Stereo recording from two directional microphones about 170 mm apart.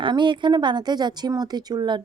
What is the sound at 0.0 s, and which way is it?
A woman's voice, 30° right (ahead or behind).